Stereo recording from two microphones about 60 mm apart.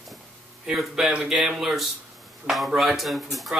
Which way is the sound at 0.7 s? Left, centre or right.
Centre.